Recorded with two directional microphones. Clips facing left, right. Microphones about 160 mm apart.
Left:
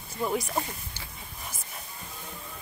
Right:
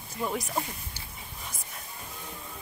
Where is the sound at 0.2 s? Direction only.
Centre (ahead or behind).